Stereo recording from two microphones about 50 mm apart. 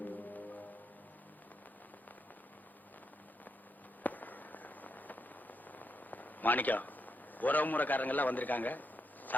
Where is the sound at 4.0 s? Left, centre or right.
Left.